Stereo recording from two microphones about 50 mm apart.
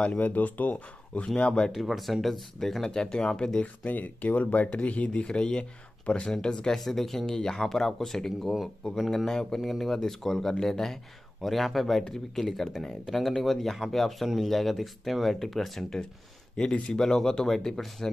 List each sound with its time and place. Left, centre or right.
0.2 s speech: left; by 1.7 s centre
1.7 s speech: centre
3.6 s speech: left; by 16.0 s centre
16.5 s speech: centre